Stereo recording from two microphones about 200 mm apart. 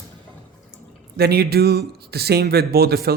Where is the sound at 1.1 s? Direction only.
55° right (ahead or behind).